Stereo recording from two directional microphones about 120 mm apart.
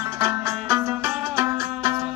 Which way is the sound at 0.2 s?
30° right (ahead or behind).